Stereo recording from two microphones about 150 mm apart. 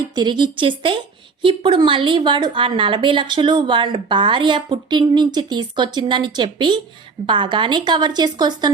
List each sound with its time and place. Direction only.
0.1 s a woman's voice: 30° right (ahead or behind)